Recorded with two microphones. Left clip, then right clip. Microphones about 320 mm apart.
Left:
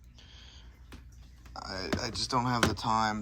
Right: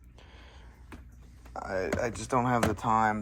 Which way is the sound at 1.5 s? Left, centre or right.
Centre.